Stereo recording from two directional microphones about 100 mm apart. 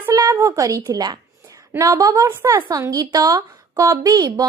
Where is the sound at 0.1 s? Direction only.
35° right (ahead or behind).